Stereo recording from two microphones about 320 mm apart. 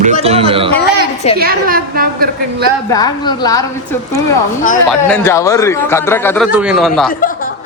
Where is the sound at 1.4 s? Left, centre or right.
Right.